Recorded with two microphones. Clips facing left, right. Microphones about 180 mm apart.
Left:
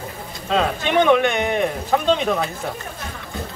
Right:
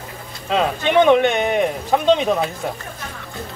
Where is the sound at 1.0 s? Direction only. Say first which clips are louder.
Right 1 dB; 20° right (ahead or behind).